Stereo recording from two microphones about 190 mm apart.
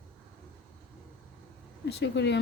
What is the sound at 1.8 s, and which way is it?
Speech, 60° left (ahead or behind).